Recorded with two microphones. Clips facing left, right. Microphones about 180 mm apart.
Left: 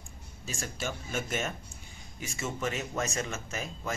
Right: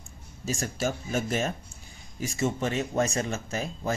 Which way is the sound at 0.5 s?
40° right (ahead or behind).